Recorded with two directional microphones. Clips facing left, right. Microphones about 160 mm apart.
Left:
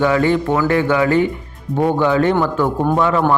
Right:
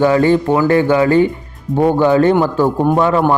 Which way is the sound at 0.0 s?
35° right (ahead or behind).